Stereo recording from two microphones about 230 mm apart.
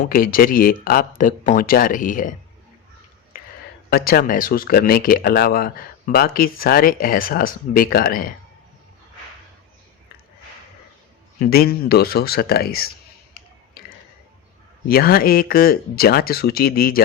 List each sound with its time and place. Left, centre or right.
0.0 s speech: left
3.8 s speech: left
11.3 s speech: left
13.8 s tick-tock: left
14.8 s speech: left